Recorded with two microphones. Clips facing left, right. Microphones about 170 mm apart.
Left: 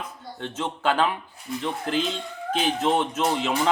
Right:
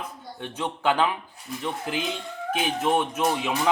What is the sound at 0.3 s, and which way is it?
Speech, 15° right (ahead or behind).